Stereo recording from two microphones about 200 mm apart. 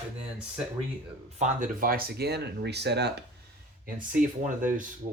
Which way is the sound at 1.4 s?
45° right (ahead or behind).